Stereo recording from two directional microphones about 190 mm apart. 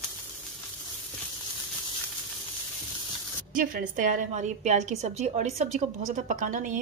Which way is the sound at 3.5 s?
45° right (ahead or behind).